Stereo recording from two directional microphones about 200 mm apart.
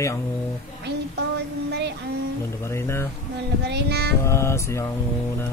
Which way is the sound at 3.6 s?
55° right (ahead or behind).